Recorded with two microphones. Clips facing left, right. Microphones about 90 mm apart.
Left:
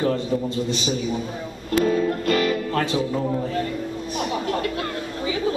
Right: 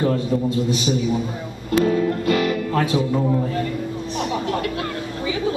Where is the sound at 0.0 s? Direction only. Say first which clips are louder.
Right 2 dB; 5° right (ahead or behind).